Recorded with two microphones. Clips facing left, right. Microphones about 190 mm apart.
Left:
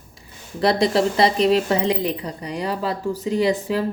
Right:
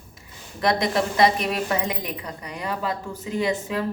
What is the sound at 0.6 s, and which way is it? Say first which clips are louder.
Speech: left 4 dB; 30° left (ahead or behind).